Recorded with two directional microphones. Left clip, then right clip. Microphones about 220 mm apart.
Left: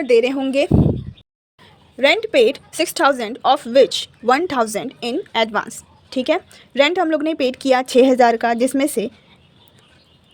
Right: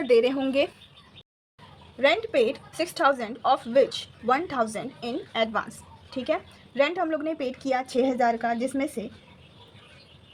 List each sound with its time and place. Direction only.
0.0 s speech: 30° left (ahead or behind)
2.0 s a woman's voice: 40° left (ahead or behind)